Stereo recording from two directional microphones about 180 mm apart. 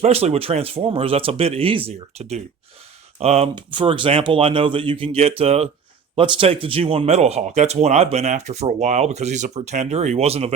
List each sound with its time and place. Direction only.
0.0 s speech: 35° right (ahead or behind)